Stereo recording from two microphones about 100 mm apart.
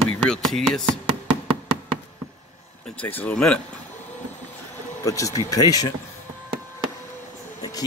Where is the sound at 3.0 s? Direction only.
15° left (ahead or behind).